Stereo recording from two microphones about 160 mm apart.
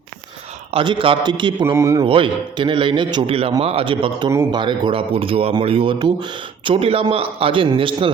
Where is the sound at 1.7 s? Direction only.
20° right (ahead or behind).